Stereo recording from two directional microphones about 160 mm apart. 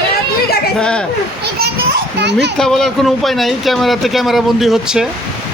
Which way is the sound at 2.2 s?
90° right.